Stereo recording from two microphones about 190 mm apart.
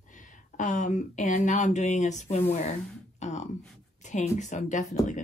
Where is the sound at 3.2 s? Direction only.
35° left (ahead or behind).